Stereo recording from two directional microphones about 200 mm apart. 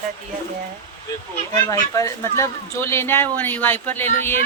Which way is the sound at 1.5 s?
15° left (ahead or behind).